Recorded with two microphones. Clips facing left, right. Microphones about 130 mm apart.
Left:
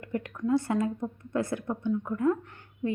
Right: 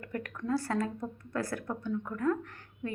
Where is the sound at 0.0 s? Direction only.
20° left (ahead or behind).